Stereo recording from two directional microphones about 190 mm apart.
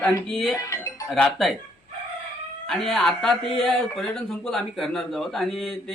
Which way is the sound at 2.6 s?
Centre (ahead or behind).